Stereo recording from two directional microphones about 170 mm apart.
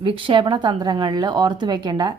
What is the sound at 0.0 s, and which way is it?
A woman's voice, 30° right (ahead or behind).